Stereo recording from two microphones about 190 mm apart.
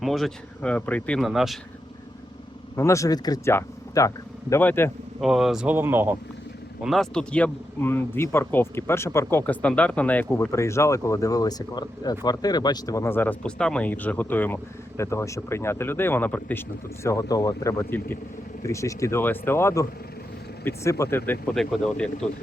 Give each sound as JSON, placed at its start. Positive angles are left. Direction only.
{"t": 0.0, "sound": "speech", "side_deg": 0}
{"t": 2.7, "sound": "speech", "side_deg": 15}
{"t": 5.2, "sound": "speech", "side_deg": 0}
{"t": 6.8, "sound": "speech", "side_deg": 0}